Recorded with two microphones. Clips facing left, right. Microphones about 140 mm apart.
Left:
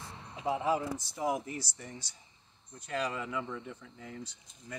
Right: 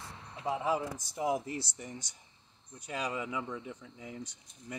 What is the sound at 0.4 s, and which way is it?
Speech, 10° left (ahead or behind).